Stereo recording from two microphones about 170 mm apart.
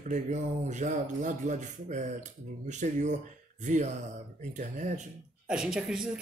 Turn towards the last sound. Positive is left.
turn(degrees=-5)  # may be behind; listen again after turning